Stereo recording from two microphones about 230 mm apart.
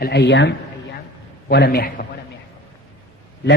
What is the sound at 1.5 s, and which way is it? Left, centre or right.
Speech, left.